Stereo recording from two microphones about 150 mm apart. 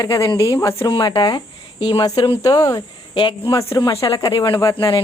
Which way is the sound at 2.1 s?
25° left (ahead or behind).